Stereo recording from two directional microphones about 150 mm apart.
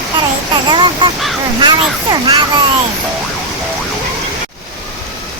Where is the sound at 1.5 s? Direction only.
30° right (ahead or behind).